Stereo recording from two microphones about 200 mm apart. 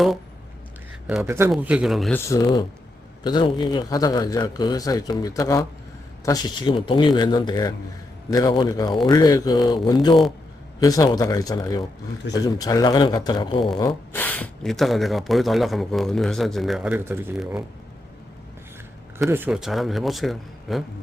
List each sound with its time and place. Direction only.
1.0 s speech: 5° right (ahead or behind)
2.1 s speech: 15° left (ahead or behind)
14.1 s speech: 10° left (ahead or behind)
19.2 s speech: 5° right (ahead or behind)